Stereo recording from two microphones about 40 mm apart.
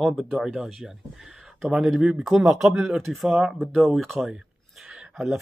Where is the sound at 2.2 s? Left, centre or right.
Centre.